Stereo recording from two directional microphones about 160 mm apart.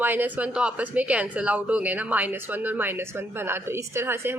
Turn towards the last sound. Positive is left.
turn(degrees=-15)  # may be behind; listen again after turning